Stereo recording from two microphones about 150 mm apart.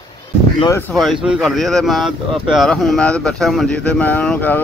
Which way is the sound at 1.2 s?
5° right (ahead or behind).